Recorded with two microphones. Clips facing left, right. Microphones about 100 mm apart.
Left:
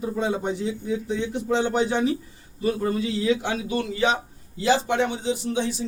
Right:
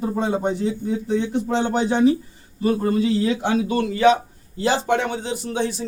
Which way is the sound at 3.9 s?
55° right (ahead or behind).